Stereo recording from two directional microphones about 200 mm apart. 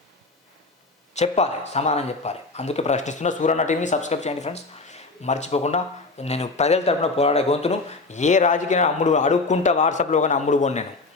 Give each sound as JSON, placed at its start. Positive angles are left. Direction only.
{"t": 1.1, "sound": "speech", "side_deg": 35}